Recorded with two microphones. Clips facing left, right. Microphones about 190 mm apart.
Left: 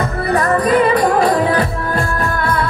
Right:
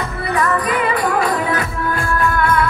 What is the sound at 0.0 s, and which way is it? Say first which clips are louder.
Music: left 3 dB; 40° left (ahead or behind).